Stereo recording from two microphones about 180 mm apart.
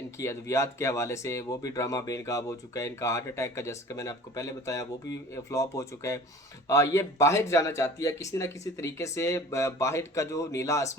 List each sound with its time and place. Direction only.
0.2 s speech: 15° left (ahead or behind)